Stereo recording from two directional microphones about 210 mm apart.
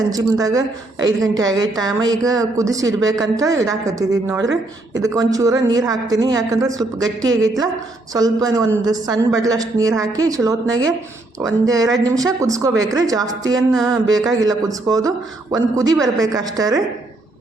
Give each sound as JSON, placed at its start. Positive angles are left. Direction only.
{"t": 0.1, "sound": "a man's voice", "side_deg": -15}